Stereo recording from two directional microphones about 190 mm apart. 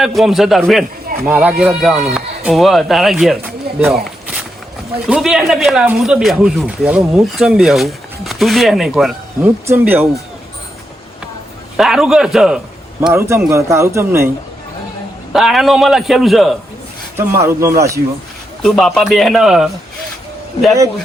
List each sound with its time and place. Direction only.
0.0 s speech: centre (ahead or behind)
5.0 s speech: 5° right (ahead or behind)
11.8 s speech: centre (ahead or behind)
13.1 s speech: 15° right (ahead or behind)
15.3 s speech: centre (ahead or behind)
17.2 s speech: 15° right (ahead or behind)
18.6 s speech: centre (ahead or behind)